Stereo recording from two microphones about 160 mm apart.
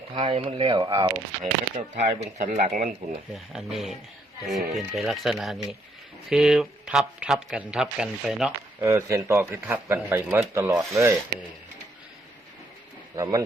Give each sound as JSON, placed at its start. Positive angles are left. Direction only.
{"t": 0.1, "sound": "speech", "side_deg": -30}
{"t": 1.7, "sound": "speech", "side_deg": -45}
{"t": 3.3, "sound": "speech", "side_deg": 0}
{"t": 8.8, "sound": "a man's voice", "side_deg": -15}
{"t": 13.1, "sound": "speech", "side_deg": -20}